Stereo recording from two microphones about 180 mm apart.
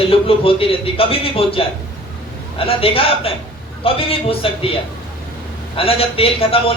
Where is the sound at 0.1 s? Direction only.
30° left (ahead or behind).